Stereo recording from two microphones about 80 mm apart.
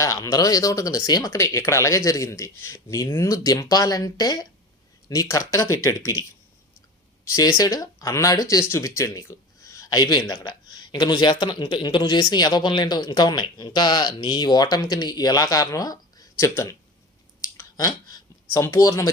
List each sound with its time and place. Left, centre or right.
0.0 s speech: left
7.3 s speech: left
9.9 s speech: left
16.3 s speech: left
17.4 s clicking: left
18.5 s speech: left